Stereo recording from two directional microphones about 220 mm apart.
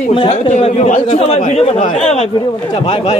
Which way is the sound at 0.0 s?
25° left (ahead or behind).